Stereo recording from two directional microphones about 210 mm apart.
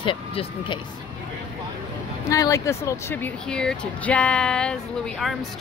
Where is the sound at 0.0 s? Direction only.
25° left (ahead or behind).